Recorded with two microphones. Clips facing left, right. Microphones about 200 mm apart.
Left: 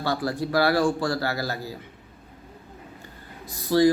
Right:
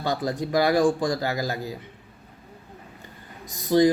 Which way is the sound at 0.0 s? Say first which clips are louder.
Even; 15° right (ahead or behind).